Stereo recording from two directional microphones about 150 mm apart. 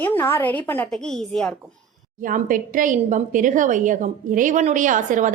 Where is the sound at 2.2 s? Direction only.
65° right (ahead or behind).